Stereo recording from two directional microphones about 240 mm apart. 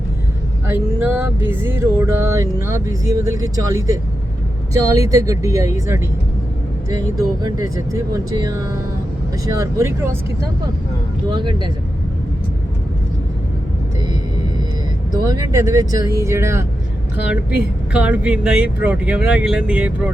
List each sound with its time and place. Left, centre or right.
0.7 s speech: centre
7.2 s speech: centre
11.3 s speech: centre
15.3 s speech: centre
17.9 s speech: centre